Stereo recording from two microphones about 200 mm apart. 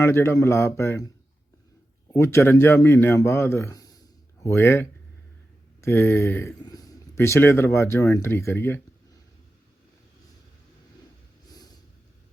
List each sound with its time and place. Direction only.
0.0 s speech: 10° left (ahead or behind)
2.1 s speech: 15° left (ahead or behind)